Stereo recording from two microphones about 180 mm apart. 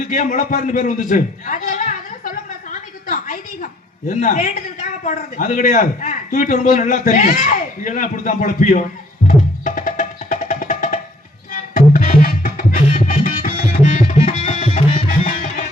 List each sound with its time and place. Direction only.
0.1 s a man's voice: 45° left (ahead or behind)
3.1 s a sound: 50° left (ahead or behind)
4.1 s a man's voice: 40° left (ahead or behind)
9.6 s music: 45° left (ahead or behind)